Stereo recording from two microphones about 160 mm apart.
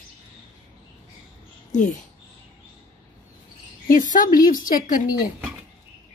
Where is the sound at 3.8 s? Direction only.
55° left (ahead or behind).